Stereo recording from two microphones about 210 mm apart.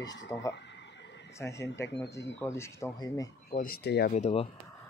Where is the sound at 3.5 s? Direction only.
45° left (ahead or behind).